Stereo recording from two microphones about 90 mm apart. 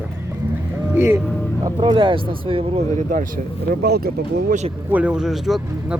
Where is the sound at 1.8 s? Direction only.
65° right (ahead or behind); by 2.8 s 85° right.